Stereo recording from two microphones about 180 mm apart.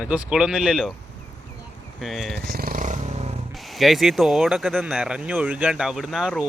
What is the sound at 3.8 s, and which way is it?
Speech, centre (ahead or behind).